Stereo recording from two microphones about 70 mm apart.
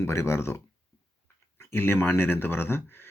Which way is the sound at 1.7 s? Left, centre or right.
Left.